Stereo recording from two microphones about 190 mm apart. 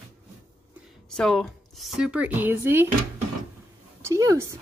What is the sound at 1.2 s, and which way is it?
Speech, centre (ahead or behind).